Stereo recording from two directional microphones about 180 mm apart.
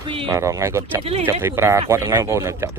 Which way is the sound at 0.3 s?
15° right (ahead or behind).